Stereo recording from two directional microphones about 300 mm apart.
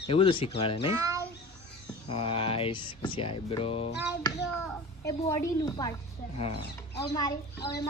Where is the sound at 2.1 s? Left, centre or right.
Centre.